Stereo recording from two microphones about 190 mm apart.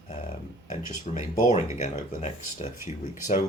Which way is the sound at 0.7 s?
40° left (ahead or behind).